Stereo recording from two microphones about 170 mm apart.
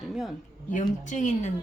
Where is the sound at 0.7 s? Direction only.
45° left (ahead or behind).